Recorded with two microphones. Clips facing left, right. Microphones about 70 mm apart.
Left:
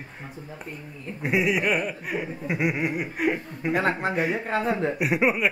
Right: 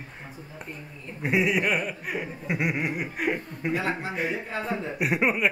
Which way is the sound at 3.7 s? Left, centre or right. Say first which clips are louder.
Left 4 dB; left.